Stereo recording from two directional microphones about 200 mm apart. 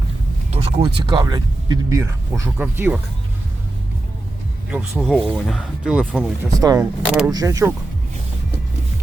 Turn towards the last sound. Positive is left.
turn(degrees=-15)  # may be behind; listen again after turning